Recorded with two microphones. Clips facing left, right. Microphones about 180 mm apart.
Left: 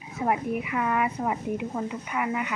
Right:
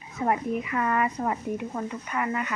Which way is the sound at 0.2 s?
10° left (ahead or behind).